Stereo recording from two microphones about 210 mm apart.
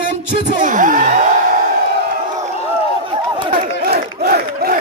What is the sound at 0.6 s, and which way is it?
Speech, 40° right (ahead or behind).